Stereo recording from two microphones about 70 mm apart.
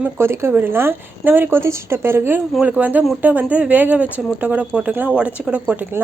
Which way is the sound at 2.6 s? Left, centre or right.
Right.